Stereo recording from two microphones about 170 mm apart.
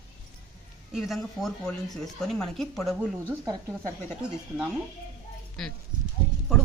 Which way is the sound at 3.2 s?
15° right (ahead or behind).